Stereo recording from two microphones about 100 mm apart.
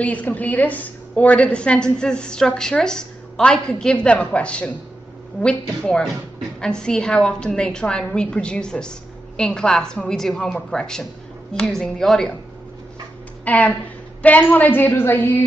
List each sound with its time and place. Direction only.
0.0 s a woman's voice: 15° left (ahead or behind)
13.5 s a woman's voice: 15° left (ahead or behind)